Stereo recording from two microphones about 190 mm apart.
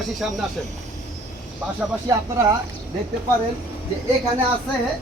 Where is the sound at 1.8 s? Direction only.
15° right (ahead or behind).